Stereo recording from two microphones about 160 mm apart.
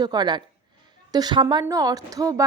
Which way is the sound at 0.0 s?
25° right (ahead or behind).